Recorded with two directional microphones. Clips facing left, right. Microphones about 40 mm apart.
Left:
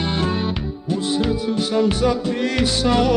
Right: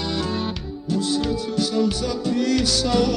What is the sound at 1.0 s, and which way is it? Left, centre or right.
Music, left.